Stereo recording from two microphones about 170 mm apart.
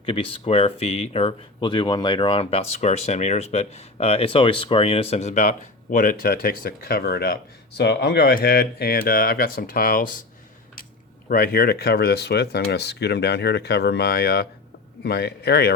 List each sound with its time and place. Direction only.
0.0 s speech: 30° left (ahead or behind); by 7.3 s 65° left (ahead or behind)
7.8 s speech: 75° left (ahead or behind); by 10.2 s 55° left (ahead or behind)
11.3 s speech: 60° left (ahead or behind)